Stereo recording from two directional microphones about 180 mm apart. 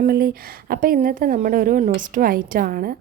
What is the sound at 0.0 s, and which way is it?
A woman's voice, 55° right (ahead or behind).